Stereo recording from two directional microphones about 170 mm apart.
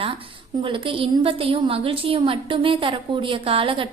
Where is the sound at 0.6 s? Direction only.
30° right (ahead or behind).